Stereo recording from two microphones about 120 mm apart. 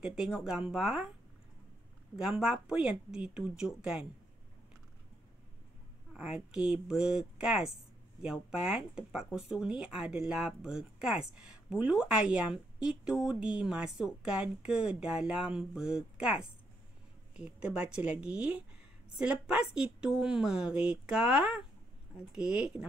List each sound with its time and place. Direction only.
0.0 s speech: 5° right (ahead or behind)
2.1 s speech: 5° right (ahead or behind)
6.1 s speech: 5° right (ahead or behind)